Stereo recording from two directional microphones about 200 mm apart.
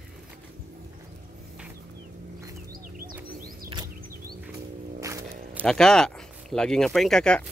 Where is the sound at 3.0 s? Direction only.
45° right (ahead or behind).